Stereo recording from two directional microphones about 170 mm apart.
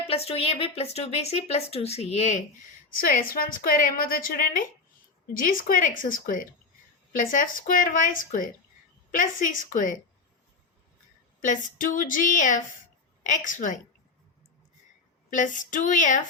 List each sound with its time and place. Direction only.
0.1 s a woman's voice: 35° left (ahead or behind)
3.0 s a woman's voice: 55° left (ahead or behind)
11.3 s a woman's voice: 50° left (ahead or behind)
15.3 s a woman's voice: 50° left (ahead or behind)